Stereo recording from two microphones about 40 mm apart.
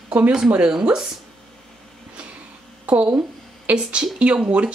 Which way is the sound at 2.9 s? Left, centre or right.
Right.